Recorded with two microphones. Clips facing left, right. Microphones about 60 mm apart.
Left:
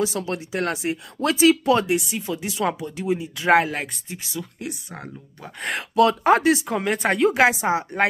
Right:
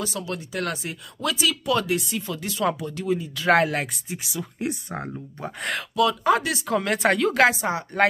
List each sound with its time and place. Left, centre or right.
0.0 s speech: left
1.9 s speech: centre
2.1 s speech: centre
3.5 s speech: centre
4.6 s speech: right
5.9 s speech: left
6.6 s speech: centre
6.9 s speech: centre